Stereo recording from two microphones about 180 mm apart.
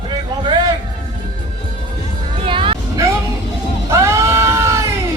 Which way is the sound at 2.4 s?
30° right (ahead or behind).